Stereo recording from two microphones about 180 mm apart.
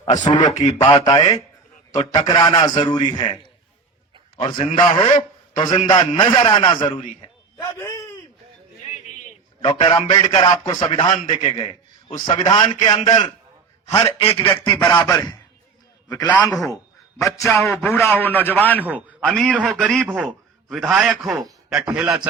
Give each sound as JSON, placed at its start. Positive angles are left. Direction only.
{"t": 0.0, "sound": "a man's voice", "side_deg": 25}
{"t": 0.5, "sound": "speech", "side_deg": 40}
{"t": 0.9, "sound": "a man's voice", "side_deg": 20}
{"t": 4.4, "sound": "a man's voice", "side_deg": 25}
{"t": 6.8, "sound": "a sound", "side_deg": 25}
{"t": 7.8, "sound": "a man's voice", "side_deg": 15}
{"t": 8.8, "sound": "a sound", "side_deg": 40}
{"t": 10.0, "sound": "a man's voice", "side_deg": 30}
{"t": 16.3, "sound": "a man's voice", "side_deg": 10}